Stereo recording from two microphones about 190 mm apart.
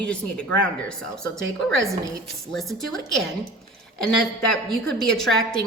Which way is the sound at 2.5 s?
Centre (ahead or behind).